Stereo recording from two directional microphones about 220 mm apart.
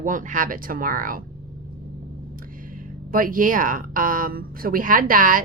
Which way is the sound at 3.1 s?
40° right (ahead or behind).